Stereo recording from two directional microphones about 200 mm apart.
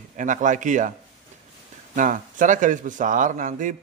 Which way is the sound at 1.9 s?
40° right (ahead or behind).